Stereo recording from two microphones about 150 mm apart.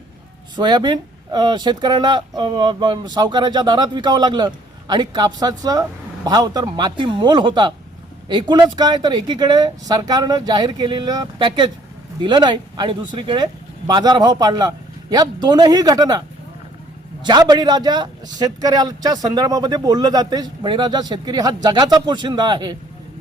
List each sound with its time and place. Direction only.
0.5 s a man's voice: 30° right (ahead or behind)
17.2 s a man's voice: 25° right (ahead or behind)